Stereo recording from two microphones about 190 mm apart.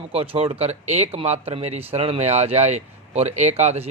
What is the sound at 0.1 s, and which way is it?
Speech, 30° right (ahead or behind).